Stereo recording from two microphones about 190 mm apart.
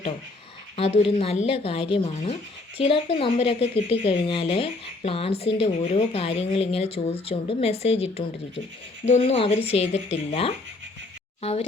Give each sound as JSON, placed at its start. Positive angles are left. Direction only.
{"t": 0.8, "sound": "speech", "side_deg": 30}
{"t": 11.4, "sound": "speech", "side_deg": 30}